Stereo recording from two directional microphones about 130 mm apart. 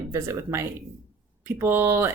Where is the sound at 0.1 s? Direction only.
20° right (ahead or behind).